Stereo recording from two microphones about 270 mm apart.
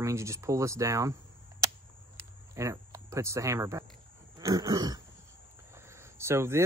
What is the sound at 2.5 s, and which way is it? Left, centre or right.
Speech, centre.